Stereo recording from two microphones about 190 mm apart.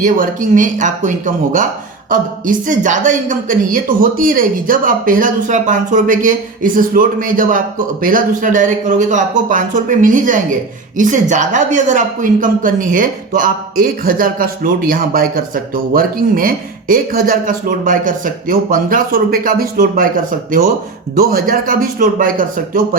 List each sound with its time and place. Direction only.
0.0 s speech: 45° right (ahead or behind)
21.2 s speech: 50° right (ahead or behind)